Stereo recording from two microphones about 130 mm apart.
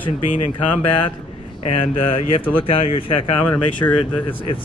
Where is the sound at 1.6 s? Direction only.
45° left (ahead or behind).